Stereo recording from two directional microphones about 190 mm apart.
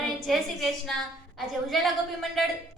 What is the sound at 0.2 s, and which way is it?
A woman's voice, centre (ahead or behind).